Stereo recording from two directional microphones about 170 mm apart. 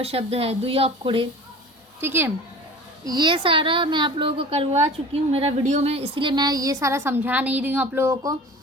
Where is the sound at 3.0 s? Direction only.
25° right (ahead or behind).